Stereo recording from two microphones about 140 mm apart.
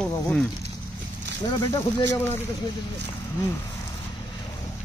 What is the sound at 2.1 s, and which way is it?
Speech, 15° left (ahead or behind).